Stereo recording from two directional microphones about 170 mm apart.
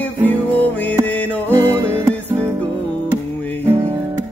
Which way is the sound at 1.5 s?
15° right (ahead or behind).